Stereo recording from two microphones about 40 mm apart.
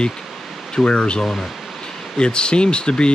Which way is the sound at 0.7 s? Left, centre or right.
Left.